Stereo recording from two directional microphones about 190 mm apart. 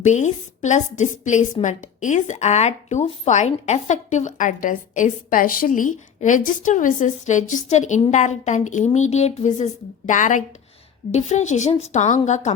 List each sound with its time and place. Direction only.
0.0 s a woman's voice: 40° left (ahead or behind)